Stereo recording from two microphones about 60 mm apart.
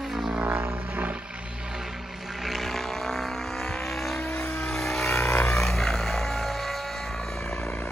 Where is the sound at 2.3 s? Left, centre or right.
Centre.